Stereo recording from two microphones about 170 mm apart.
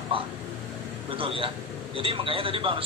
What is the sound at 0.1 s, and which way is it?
A man's voice, 30° right (ahead or behind).